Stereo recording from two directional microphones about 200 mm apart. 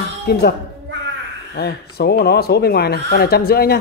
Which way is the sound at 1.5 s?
55° left (ahead or behind).